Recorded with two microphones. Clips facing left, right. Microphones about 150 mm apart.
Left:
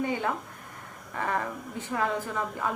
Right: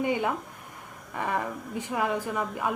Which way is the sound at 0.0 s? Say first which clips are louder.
Right 2 dB; 15° right (ahead or behind).